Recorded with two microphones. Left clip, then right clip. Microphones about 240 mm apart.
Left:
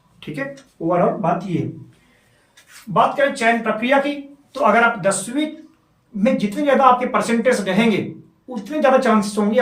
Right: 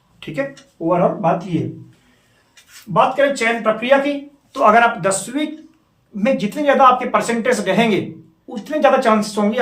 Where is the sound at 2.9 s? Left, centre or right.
Centre.